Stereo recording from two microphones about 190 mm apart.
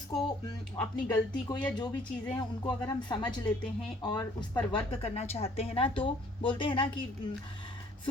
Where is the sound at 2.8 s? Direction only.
25° left (ahead or behind).